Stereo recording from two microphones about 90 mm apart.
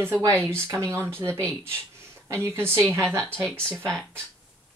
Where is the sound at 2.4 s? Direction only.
30° right (ahead or behind).